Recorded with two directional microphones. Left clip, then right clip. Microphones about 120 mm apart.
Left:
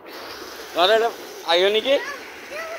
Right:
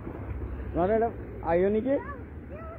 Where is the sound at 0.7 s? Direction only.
20° left (ahead or behind).